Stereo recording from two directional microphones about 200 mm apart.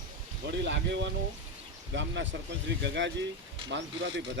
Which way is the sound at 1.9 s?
65° right (ahead or behind).